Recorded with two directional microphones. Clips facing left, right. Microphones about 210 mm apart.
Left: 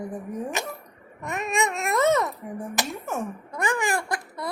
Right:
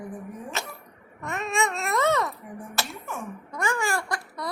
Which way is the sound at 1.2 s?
15° left (ahead or behind).